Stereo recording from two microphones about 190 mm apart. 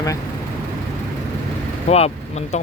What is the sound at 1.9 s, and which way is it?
Speech, 35° left (ahead or behind).